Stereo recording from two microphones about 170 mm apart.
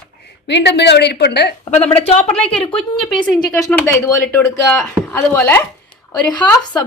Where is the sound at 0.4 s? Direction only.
90° left.